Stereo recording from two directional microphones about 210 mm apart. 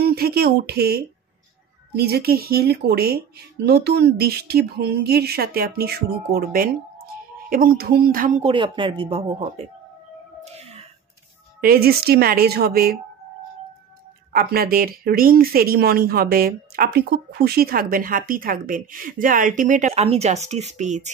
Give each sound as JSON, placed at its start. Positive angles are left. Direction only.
{"t": 0.0, "sound": "speech", "side_deg": -45}
{"t": 8.4, "sound": "speech", "side_deg": -25}
{"t": 10.6, "sound": "a sound", "side_deg": -30}
{"t": 11.6, "sound": "speech", "side_deg": -45}
{"t": 14.3, "sound": "speech", "side_deg": -45}